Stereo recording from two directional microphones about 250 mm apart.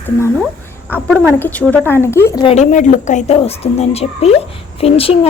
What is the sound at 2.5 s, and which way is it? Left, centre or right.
Speech, left.